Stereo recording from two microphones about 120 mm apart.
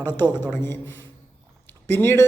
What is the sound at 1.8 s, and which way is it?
Speech, 20° left (ahead or behind).